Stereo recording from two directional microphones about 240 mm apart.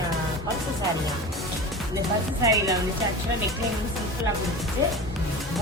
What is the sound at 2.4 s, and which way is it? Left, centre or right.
Speech, centre.